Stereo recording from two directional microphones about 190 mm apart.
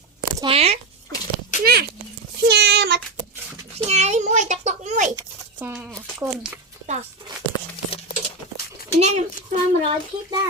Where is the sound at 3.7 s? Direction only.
35° right (ahead or behind).